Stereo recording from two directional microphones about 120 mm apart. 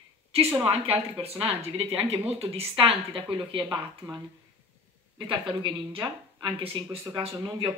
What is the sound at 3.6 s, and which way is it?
A woman's voice, 35° right (ahead or behind).